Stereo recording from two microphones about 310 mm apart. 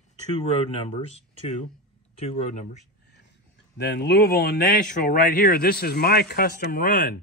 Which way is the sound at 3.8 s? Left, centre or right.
Left.